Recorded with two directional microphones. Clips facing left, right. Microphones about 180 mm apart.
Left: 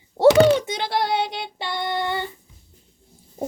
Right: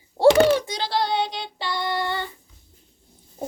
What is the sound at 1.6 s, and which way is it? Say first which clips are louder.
Child singing: even; 20° left (ahead or behind).